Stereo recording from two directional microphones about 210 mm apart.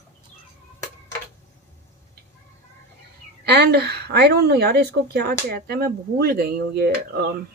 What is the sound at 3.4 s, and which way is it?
A woman's voice, 50° right (ahead or behind).